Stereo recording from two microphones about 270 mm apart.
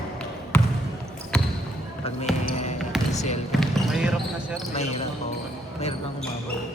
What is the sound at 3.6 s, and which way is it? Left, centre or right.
Speech, centre.